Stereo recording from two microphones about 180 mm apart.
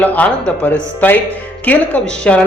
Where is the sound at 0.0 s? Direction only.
10° left (ahead or behind).